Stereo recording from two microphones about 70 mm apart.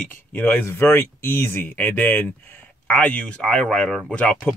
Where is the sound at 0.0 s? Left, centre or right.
Left.